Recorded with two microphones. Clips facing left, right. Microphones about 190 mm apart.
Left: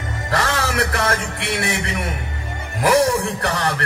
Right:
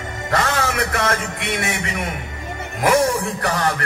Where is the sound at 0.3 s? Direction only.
30° left (ahead or behind).